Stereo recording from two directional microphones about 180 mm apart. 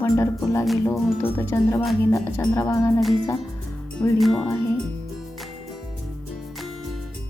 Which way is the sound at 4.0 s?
Centre (ahead or behind).